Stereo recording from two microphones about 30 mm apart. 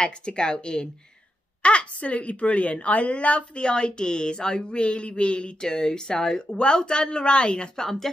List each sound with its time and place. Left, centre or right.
0.0 s speech: left
1.6 s speech: left
5.6 s speech: left
6.5 s speech: left
7.8 s speech: centre